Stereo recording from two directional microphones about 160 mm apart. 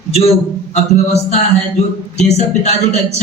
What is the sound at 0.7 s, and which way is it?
A man's voice, 45° left (ahead or behind).